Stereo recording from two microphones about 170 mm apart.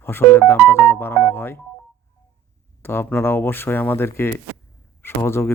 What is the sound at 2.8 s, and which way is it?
Speech, 15° left (ahead or behind).